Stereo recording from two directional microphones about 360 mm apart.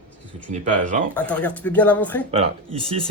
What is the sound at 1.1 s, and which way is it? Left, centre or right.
Speech, centre.